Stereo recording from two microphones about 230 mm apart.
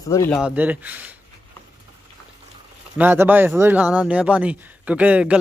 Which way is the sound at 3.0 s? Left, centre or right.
Centre.